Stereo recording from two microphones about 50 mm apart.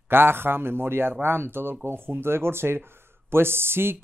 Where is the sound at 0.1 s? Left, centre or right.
Right.